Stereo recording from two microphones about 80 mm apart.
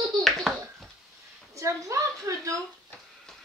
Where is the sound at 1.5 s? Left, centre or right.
Right.